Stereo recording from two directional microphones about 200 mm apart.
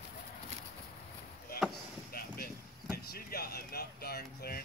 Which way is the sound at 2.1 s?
50° left (ahead or behind).